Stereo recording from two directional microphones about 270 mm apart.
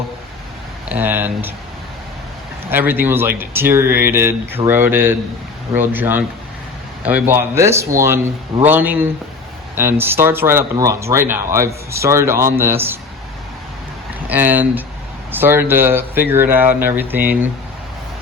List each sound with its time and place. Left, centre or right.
0.9 s speech: centre
2.6 s speech: centre
14.3 s speech: centre